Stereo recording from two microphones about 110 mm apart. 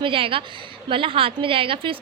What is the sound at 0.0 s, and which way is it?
A woman's voice, 55° right (ahead or behind).